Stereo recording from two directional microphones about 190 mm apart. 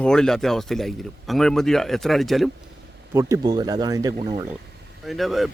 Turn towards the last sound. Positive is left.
turn(degrees=0)  # may be behind; listen again after turning